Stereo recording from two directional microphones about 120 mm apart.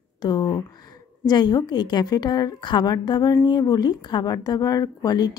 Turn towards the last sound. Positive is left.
turn(degrees=35)  # may be behind; listen again after turning